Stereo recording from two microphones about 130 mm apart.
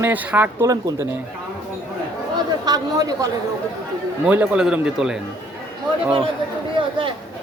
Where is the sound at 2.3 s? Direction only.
30° right (ahead or behind).